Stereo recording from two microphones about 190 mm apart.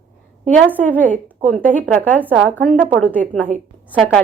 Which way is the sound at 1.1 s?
40° right (ahead or behind).